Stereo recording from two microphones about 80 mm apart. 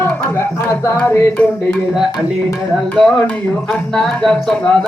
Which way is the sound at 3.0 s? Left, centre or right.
Centre.